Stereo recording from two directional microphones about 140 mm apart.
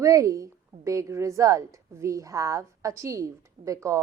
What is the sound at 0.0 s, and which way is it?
A woman's voice, 25° right (ahead or behind).